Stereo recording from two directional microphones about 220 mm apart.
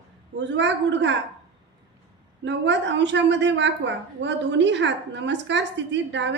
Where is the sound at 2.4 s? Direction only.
55° right (ahead or behind).